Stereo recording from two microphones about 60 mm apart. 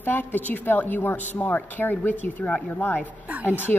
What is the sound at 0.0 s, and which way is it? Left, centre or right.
A woman's voice, left.